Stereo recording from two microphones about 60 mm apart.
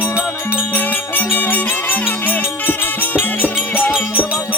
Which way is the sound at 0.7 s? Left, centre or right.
Left.